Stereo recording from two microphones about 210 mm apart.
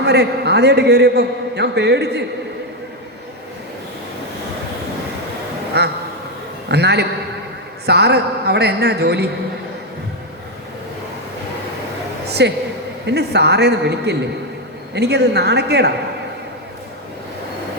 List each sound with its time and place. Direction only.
0.0 s a man's voice: 50° right (ahead or behind)
5.7 s a man's voice: 50° right (ahead or behind)
12.3 s a woman's voice: 50° right (ahead or behind)